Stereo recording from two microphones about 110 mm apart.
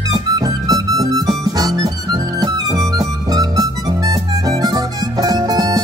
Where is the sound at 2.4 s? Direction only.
35° right (ahead or behind).